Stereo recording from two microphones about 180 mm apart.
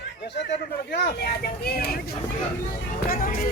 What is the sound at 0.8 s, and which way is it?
Speech, 65° left (ahead or behind).